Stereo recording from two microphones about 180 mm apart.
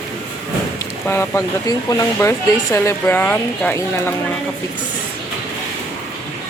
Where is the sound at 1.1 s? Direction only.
15° left (ahead or behind).